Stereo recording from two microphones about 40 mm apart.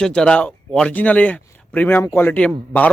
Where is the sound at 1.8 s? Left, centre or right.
Left.